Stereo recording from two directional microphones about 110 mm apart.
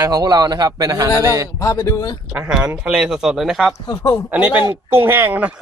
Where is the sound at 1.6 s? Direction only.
30° left (ahead or behind).